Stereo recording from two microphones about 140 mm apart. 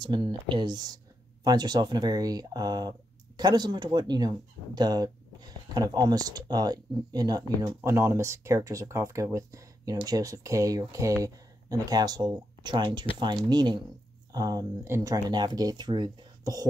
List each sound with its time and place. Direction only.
0.0 s speech: 35° right (ahead or behind)